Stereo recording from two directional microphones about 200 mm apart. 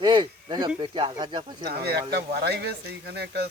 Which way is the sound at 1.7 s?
50° right (ahead or behind).